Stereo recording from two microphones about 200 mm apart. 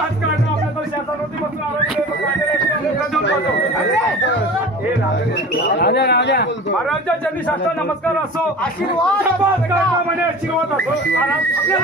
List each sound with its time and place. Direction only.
5.8 s speech: 55° left (ahead or behind)